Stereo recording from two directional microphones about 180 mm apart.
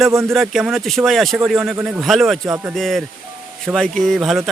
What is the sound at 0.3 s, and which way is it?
Speech, centre (ahead or behind).